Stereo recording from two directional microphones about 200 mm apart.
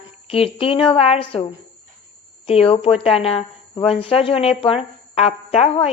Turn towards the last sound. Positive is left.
turn(degrees=30)  # may be behind; listen again after turning